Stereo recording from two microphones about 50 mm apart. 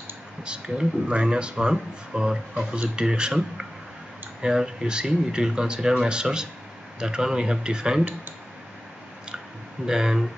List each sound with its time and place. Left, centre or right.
0.4 s speech: centre
9.8 s speech: centre